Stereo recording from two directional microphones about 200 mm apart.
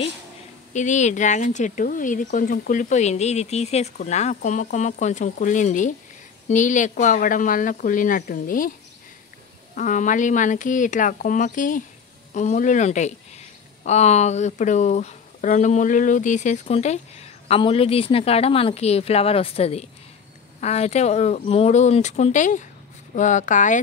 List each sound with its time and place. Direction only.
0.7 s speech: 35° left (ahead or behind)
9.8 s speech: 40° left (ahead or behind)